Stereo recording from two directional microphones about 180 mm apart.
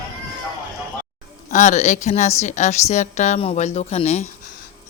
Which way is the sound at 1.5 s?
40° left (ahead or behind).